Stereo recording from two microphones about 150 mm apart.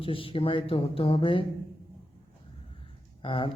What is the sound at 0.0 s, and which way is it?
Speech, 35° left (ahead or behind).